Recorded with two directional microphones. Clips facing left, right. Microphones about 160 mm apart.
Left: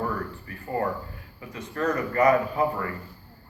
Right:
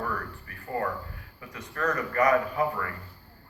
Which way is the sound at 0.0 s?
25° left (ahead or behind).